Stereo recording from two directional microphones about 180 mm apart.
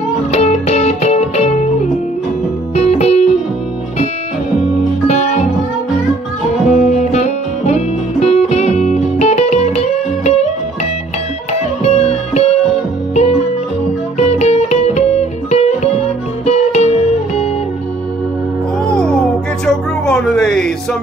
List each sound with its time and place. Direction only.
0.3 s music: 40° left (ahead or behind)
2.7 s music: 35° left (ahead or behind)
6.7 s music: 40° left (ahead or behind)
11.8 s music: 35° left (ahead or behind)
18.9 s music: 5° left (ahead or behind)